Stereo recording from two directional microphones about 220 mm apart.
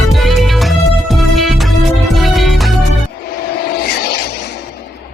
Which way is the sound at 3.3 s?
45° left (ahead or behind).